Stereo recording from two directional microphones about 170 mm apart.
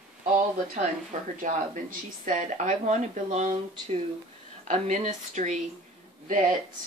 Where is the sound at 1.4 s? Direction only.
50° right (ahead or behind).